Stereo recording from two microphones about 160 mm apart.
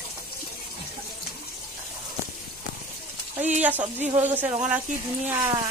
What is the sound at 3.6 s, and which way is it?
Speech, 10° right (ahead or behind).